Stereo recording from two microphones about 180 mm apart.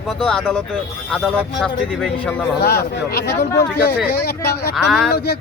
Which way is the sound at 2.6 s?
60° left (ahead or behind).